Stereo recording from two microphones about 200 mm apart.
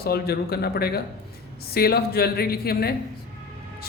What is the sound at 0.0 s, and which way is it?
A man's voice, 50° left (ahead or behind).